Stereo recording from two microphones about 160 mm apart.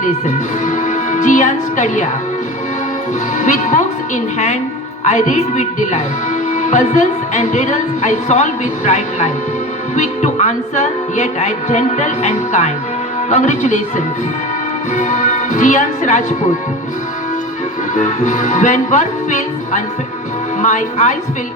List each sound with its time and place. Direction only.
0.0 s speech: 50° left (ahead or behind)
3.3 s speech: 50° left (ahead or behind)
17.9 s speech: 50° left (ahead or behind)